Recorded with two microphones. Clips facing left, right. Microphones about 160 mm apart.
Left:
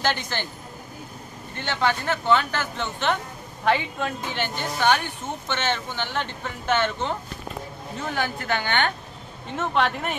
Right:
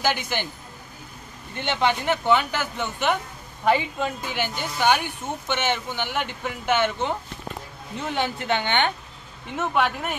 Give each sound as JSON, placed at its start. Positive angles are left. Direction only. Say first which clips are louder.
{"t": 0.0, "sound": "speech", "louder": "right 1 dB", "side_deg": -10}
{"t": 1.6, "sound": "a woman's voice", "louder": "right 1 dB", "side_deg": -20}
{"t": 9.6, "sound": "speech", "louder": "even", "side_deg": -5}